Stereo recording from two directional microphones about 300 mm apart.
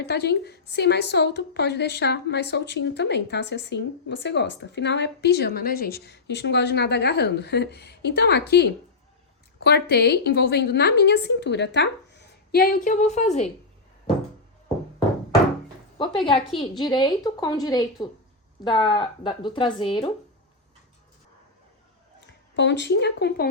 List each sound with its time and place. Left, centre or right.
0.0 s a woman's voice: left
16.6 s a woman's voice: centre
22.3 s a woman's voice: left